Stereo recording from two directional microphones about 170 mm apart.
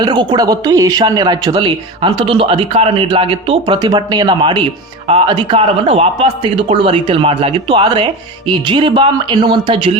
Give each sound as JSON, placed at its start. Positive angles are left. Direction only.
{"t": 0.0, "sound": "speech", "side_deg": -25}